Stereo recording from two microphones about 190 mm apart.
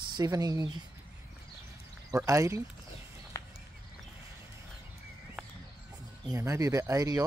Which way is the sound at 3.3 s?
15° left (ahead or behind).